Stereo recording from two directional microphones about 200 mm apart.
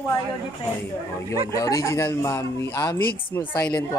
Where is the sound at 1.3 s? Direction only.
20° left (ahead or behind).